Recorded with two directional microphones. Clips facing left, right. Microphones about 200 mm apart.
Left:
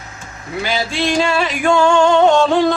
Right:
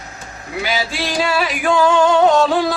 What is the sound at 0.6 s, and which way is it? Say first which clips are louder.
Music: left 3 dB; 5° right (ahead or behind).